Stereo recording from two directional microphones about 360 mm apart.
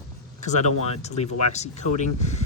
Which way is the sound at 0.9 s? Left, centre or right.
Centre.